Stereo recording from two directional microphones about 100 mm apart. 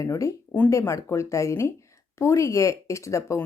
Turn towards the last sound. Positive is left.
turn(degrees=30)  # may be behind; listen again after turning